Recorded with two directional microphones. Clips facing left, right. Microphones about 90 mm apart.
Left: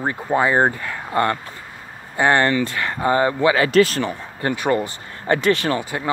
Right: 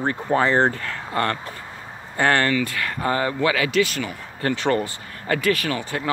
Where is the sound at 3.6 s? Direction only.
40° left (ahead or behind).